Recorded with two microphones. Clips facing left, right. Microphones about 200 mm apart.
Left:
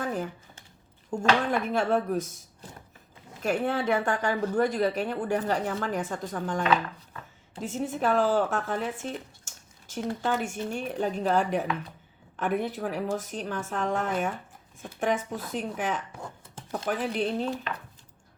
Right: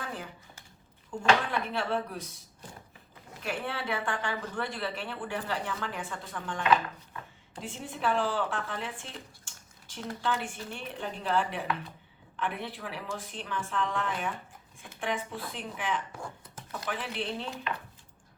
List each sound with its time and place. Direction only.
0.0 s computer keyboard: 45° left (ahead or behind)
1.1 s speech: 45° left (ahead or behind)
3.4 s speech: 45° left (ahead or behind)